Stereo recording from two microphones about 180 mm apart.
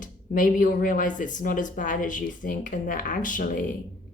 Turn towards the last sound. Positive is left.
turn(degrees=50)  # may be behind; listen again after turning